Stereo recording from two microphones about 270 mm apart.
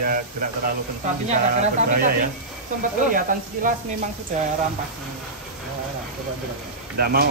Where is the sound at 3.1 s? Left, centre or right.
Right.